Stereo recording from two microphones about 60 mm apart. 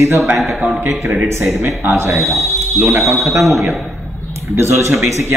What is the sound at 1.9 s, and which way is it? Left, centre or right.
Speech, right.